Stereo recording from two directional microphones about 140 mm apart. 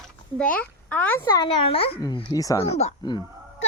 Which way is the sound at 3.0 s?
30° left (ahead or behind).